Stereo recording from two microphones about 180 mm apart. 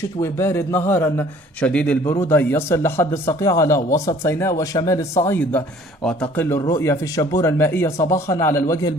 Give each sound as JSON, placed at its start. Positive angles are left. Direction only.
{"t": 0.0, "sound": "speech", "side_deg": 15}